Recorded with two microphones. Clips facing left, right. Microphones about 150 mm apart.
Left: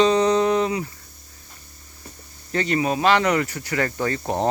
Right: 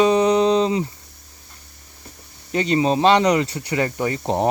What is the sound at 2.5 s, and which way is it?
Speech, 20° right (ahead or behind).